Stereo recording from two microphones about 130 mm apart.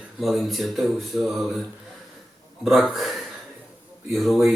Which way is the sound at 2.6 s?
Centre (ahead or behind).